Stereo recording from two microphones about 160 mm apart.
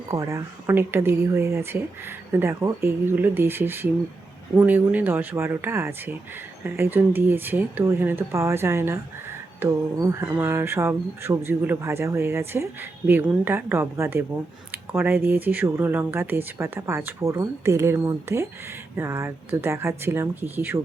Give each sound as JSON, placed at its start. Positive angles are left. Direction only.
{"t": 0.1, "sound": "speech", "side_deg": -20}